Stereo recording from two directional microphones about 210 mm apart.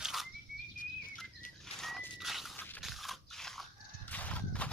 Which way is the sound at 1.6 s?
Centre (ahead or behind).